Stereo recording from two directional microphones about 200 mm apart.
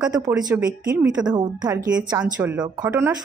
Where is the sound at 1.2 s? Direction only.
20° right (ahead or behind).